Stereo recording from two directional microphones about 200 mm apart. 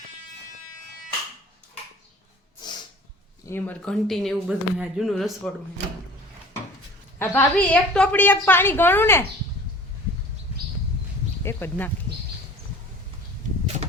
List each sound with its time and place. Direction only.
2.6 s snort: 20° left (ahead or behind)
3.4 s speech: 10° left (ahead or behind)
7.2 s a woman's voice: 10° left (ahead or behind)
11.4 s speech: 10° left (ahead or behind)